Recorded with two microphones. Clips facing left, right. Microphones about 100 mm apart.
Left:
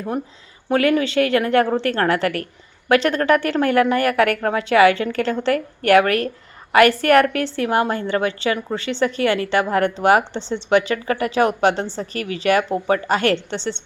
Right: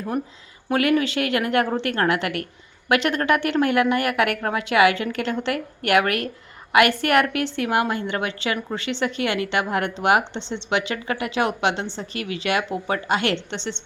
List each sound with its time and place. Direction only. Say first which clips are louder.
0.7 s a woman's voice: left 3 dB; 30° left (ahead or behind)